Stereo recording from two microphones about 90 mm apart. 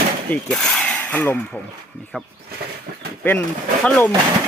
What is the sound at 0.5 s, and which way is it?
Speech, 5° left (ahead or behind).